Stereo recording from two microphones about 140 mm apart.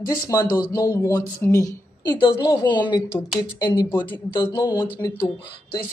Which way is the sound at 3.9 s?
10° left (ahead or behind).